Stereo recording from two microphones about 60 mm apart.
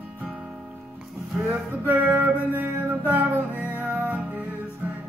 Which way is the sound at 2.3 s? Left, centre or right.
Right.